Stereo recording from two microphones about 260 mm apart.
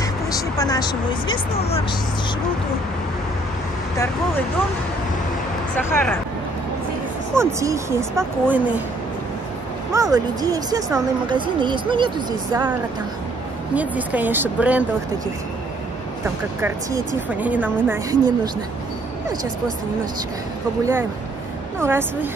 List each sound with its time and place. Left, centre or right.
0.0 s speech: centre
5.8 s speech: centre
7.3 s speech: centre
9.9 s speech: centre
13.7 s speech: centre
17.3 s speech: centre
20.8 s speech: centre